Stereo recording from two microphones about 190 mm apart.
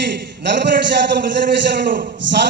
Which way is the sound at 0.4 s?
65° right (ahead or behind).